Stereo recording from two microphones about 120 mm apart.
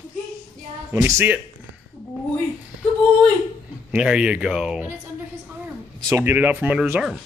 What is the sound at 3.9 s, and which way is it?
Speech, 5° right (ahead or behind).